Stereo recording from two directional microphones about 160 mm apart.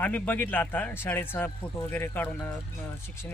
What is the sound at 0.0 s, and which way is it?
Speech, 10° left (ahead or behind).